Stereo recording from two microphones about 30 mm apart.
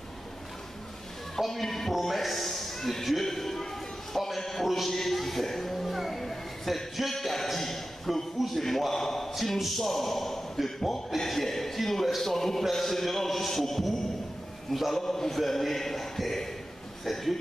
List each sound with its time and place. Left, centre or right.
1.5 s a man's voice: centre
4.1 s a sound: centre
4.6 s speech: centre
4.9 s speech: centre
7.4 s a sound: centre
9.3 s a man's voice: centre